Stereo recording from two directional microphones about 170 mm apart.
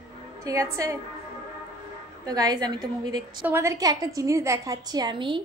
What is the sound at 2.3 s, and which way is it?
A woman's voice, 20° right (ahead or behind).